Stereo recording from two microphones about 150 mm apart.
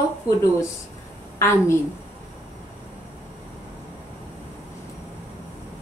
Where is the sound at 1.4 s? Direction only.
20° left (ahead or behind).